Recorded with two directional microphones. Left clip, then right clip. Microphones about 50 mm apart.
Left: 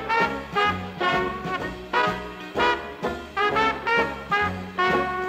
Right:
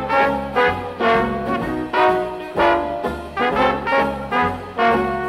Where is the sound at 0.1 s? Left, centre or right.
Left.